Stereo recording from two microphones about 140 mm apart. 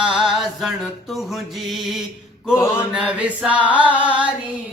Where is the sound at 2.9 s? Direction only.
5° right (ahead or behind).